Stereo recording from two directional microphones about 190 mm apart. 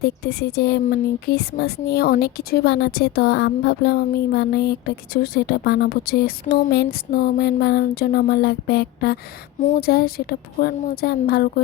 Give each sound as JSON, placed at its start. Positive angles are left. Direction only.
{"t": 0.0, "sound": "speech", "side_deg": 55}
{"t": 9.6, "sound": "speech", "side_deg": 45}